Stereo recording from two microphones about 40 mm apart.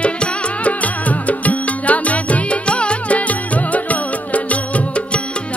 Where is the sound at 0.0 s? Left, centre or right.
Left.